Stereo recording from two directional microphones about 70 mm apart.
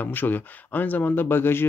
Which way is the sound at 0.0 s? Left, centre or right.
Left.